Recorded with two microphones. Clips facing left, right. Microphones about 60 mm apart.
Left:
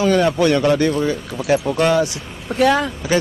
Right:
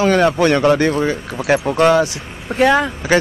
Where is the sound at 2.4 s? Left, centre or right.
Right.